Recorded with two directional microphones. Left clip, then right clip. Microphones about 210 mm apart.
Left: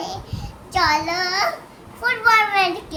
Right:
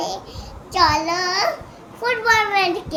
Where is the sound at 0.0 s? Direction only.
20° left (ahead or behind).